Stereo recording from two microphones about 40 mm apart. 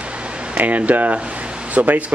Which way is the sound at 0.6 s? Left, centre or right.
Right.